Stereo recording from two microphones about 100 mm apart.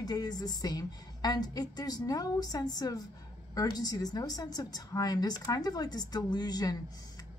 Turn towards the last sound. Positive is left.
turn(degrees=40)  # may be behind; listen again after turning